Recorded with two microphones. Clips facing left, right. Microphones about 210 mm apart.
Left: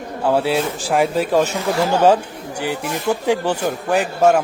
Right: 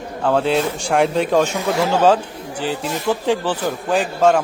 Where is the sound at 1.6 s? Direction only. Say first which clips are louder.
Even; 25° left (ahead or behind).